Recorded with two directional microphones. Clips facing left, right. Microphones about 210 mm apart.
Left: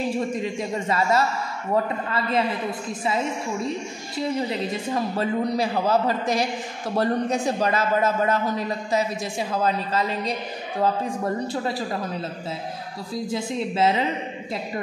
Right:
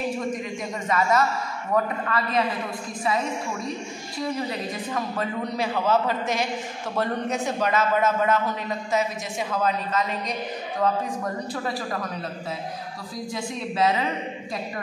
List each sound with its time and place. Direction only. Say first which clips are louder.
0.3 s a man's voice: left 3 dB; 30° left (ahead or behind)
4.2 s a man's voice: left 3 dB; 25° left (ahead or behind)
13.3 s a man's voice: left 3 dB; 25° left (ahead or behind)